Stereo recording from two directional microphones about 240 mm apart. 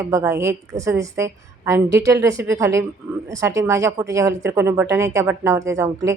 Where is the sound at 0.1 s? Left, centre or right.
Centre.